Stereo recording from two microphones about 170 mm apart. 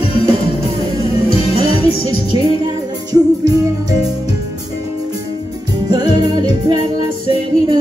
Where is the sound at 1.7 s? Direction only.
35° left (ahead or behind).